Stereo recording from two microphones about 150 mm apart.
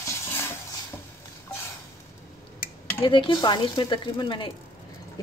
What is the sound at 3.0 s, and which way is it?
A woman's voice, 35° left (ahead or behind).